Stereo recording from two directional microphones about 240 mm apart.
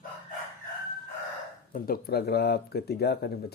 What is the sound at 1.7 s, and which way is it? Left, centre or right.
Speech, left.